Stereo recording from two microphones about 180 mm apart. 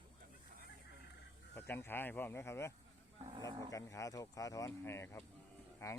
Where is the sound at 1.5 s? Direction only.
10° left (ahead or behind).